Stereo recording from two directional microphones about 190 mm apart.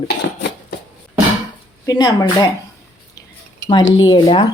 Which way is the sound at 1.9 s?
20° left (ahead or behind).